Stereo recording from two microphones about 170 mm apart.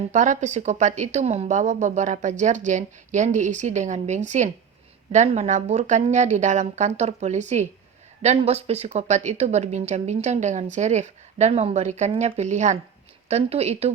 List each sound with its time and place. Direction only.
0.1 s a woman's voice: 45° right (ahead or behind)